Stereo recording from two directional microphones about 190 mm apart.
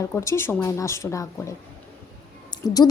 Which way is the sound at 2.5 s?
20° left (ahead or behind).